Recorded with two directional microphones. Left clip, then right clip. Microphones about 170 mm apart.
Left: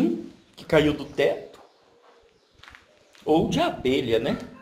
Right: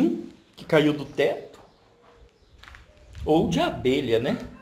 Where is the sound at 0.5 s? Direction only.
10° right (ahead or behind).